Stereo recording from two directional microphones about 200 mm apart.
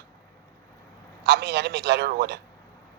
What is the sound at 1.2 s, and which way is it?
A man's voice, 55° right (ahead or behind).